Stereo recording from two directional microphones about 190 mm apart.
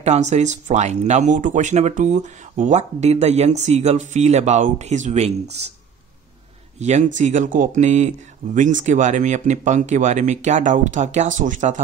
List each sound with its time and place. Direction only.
0.0 s speech: 35° right (ahead or behind)
6.8 s speech: 35° right (ahead or behind)